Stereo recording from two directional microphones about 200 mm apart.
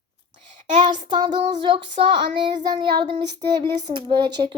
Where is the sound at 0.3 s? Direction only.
30° right (ahead or behind).